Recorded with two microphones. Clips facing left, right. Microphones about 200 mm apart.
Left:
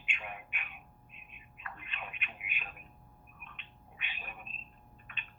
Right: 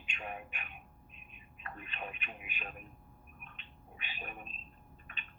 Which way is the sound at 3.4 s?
35° right (ahead or behind).